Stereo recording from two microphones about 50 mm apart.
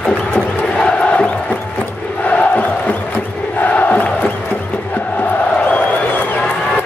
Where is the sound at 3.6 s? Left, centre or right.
Left.